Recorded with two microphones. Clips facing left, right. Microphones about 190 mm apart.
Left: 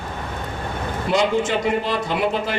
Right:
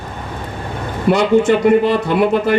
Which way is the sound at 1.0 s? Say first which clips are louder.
Right 8 dB; 60° right (ahead or behind).